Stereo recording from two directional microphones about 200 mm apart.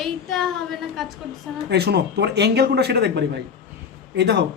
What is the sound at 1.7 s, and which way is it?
A man's voice, 55° right (ahead or behind).